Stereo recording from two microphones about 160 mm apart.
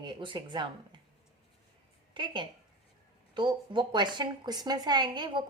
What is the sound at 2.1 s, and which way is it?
A woman's voice, 30° right (ahead or behind).